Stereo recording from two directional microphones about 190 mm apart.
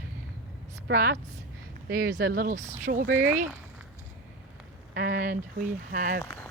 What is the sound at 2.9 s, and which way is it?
Speech, 60° right (ahead or behind).